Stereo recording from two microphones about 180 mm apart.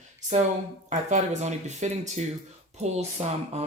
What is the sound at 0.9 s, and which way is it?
Speech, 40° right (ahead or behind).